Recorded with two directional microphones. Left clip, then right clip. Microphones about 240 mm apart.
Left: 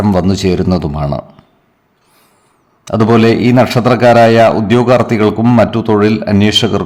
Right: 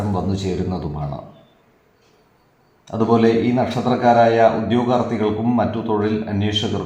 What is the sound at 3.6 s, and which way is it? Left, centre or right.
A man's voice, left.